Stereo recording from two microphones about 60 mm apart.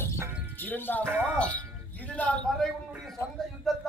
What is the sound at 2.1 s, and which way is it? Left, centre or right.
Speech, left.